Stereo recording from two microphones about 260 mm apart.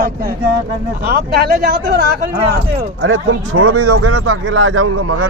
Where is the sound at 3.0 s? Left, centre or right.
Right.